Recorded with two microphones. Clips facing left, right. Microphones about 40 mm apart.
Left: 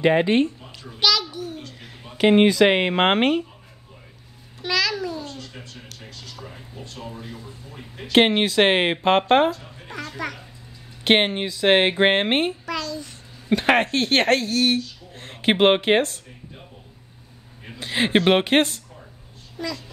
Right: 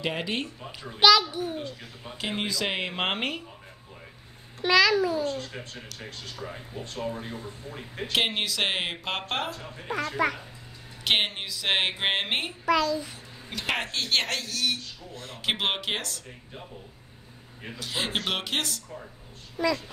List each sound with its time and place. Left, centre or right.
0.0 s speech: left
0.7 s a child's voice: centre
2.1 s speech: left
4.6 s a child's voice: centre
5.2 s speech: right
8.1 s speech: left
10.1 s a child's voice: centre
11.1 s speech: left
12.6 s a child's voice: centre
13.9 s speech: left
17.7 s speech: left
19.6 s a child's voice: centre